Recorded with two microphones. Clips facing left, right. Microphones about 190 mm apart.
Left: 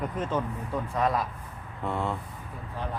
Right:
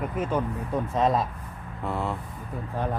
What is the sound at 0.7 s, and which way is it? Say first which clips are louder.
Speech: right 3 dB; 20° right (ahead or behind).